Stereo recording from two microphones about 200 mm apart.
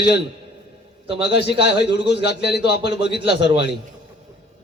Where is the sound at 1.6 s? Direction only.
55° left (ahead or behind).